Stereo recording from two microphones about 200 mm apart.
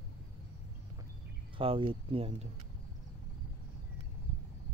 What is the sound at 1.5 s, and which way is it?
Speech, 25° right (ahead or behind).